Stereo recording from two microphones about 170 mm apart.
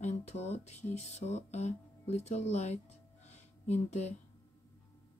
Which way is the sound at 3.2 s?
40° left (ahead or behind).